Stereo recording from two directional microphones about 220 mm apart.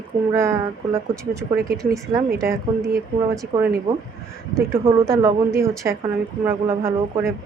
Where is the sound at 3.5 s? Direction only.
15° right (ahead or behind).